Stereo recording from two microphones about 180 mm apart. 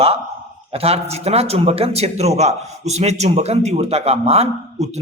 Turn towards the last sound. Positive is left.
turn(degrees=-35)  # may be behind; listen again after turning